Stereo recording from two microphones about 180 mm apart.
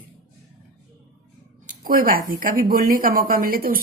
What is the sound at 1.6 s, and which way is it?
Speech, 50° right (ahead or behind).